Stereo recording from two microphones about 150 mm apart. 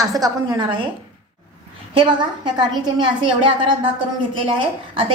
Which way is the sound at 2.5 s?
30° right (ahead or behind).